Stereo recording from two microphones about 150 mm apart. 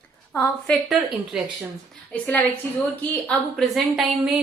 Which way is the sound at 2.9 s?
5° left (ahead or behind).